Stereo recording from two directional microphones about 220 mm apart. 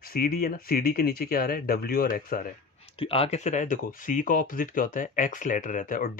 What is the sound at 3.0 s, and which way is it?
Speech, 25° left (ahead or behind).